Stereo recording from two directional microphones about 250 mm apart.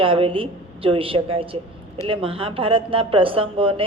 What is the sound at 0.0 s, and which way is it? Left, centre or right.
Speech, right.